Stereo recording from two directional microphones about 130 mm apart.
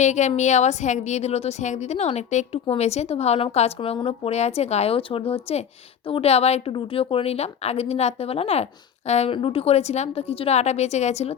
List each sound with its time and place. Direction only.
0.0 s a woman's voice: 65° left (ahead or behind)